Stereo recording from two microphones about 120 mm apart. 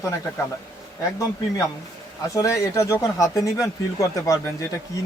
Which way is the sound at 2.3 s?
25° left (ahead or behind).